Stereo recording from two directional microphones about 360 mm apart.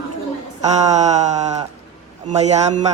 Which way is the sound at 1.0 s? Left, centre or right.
Centre.